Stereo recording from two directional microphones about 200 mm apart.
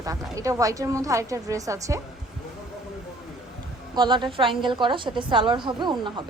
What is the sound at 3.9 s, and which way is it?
A woman's voice, 20° right (ahead or behind).